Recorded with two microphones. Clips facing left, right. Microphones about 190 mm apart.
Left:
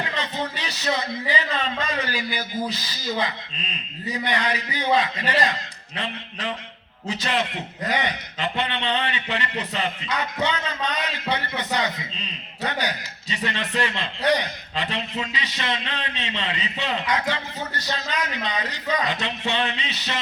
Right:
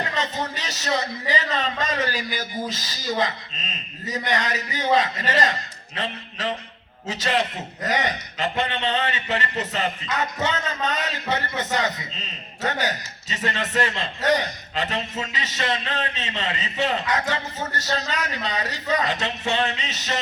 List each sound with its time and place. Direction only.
0.2 s a sound: 40° right (ahead or behind)
1.3 s a man's voice: 40° right (ahead or behind)
7.1 s a man's voice: 40° right (ahead or behind)
13.3 s a man's voice: 40° right (ahead or behind)